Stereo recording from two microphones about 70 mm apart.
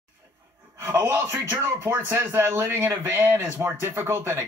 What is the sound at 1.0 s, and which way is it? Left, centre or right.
Speech, right.